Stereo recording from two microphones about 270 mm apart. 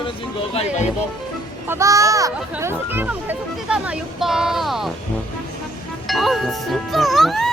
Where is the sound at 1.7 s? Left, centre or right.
Centre.